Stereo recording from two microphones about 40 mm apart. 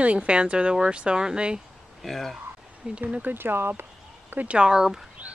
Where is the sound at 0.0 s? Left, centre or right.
Right.